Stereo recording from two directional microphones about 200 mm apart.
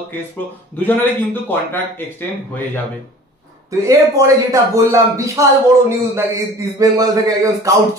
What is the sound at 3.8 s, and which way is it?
A man's voice, 15° right (ahead or behind).